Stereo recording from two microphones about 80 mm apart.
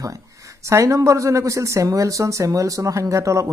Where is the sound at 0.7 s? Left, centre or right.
Right.